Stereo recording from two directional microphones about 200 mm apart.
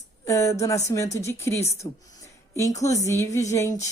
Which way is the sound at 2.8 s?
15° left (ahead or behind).